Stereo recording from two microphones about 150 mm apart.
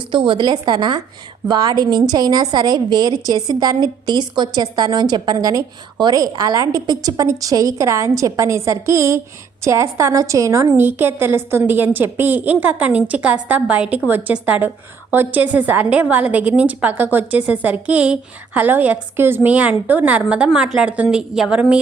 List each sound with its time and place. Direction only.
0.1 s a woman's voice: 35° right (ahead or behind); by 21.8 s 10° right (ahead or behind)